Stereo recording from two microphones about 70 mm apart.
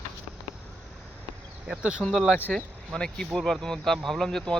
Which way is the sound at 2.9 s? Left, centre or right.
Centre.